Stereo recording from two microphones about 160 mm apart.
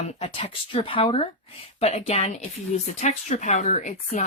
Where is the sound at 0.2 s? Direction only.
35° left (ahead or behind).